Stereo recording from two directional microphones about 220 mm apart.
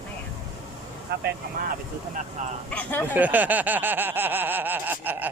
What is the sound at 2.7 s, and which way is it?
Speech, 10° left (ahead or behind).